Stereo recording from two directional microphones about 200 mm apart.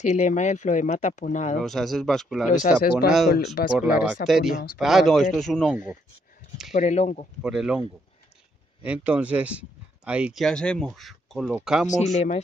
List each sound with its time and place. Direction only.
0.0 s speech: 35° left (ahead or behind)
1.6 s speech: centre (ahead or behind)
2.4 s speech: 40° left (ahead or behind)
4.1 s speech: centre (ahead or behind)
6.7 s speech: 35° left (ahead or behind)
7.4 s speech: 5° right (ahead or behind)
8.8 s speech: 5° right (ahead or behind)
11.9 s speech: 35° left (ahead or behind)